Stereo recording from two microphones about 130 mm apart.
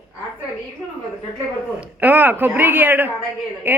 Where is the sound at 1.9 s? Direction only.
15° right (ahead or behind).